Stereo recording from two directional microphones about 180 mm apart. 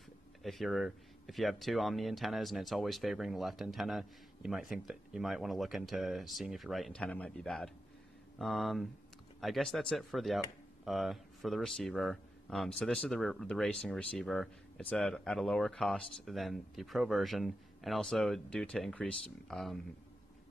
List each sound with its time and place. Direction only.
0.4 s speech: centre (ahead or behind)